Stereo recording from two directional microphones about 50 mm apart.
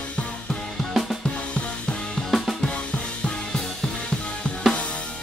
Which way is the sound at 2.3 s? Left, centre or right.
Centre.